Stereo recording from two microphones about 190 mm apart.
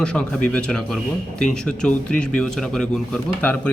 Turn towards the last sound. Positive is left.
turn(degrees=5)  # may be behind; listen again after turning